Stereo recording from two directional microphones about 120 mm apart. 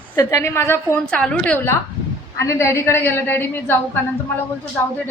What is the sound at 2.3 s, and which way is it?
A woman's voice, 25° left (ahead or behind).